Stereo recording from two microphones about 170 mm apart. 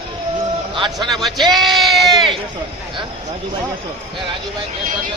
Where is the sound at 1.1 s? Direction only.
Centre (ahead or behind).